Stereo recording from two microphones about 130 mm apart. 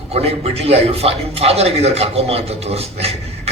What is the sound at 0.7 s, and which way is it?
A man's voice, 50° right (ahead or behind).